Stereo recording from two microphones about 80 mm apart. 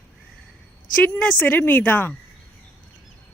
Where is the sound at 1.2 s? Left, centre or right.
Left.